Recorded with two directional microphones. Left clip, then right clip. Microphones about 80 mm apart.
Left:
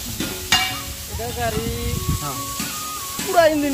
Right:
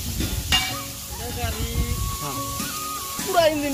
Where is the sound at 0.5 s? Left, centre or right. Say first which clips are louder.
Left 3 dB; left.